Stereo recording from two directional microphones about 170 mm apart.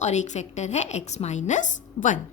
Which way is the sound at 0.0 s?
45° left (ahead or behind).